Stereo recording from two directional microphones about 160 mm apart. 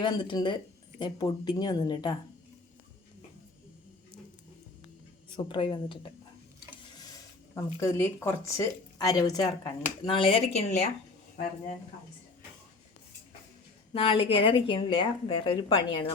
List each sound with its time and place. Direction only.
0.0 s speech: 25° left (ahead or behind)
5.5 s a woman's voice: 30° left (ahead or behind)
7.5 s speech: 15° left (ahead or behind); by 10.8 s 40° left (ahead or behind)
13.9 s a woman's voice: 35° left (ahead or behind)